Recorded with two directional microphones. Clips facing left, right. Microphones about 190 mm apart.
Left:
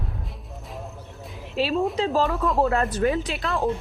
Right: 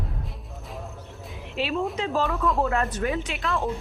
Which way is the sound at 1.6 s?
35° left (ahead or behind).